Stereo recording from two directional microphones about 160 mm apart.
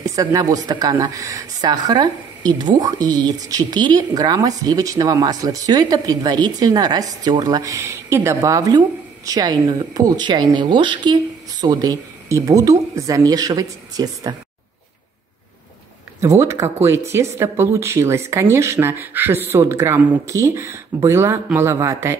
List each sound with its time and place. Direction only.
0.0 s speech: 20° right (ahead or behind)
16.2 s speech: 20° right (ahead or behind)